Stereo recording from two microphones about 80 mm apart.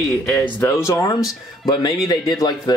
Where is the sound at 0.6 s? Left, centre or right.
Left.